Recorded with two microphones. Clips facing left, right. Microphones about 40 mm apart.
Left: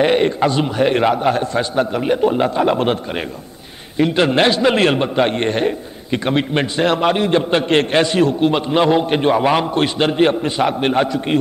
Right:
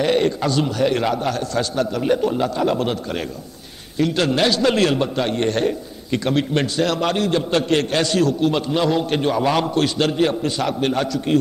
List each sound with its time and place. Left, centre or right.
0.0 s a man's voice: left
4.0 s a man's voice: left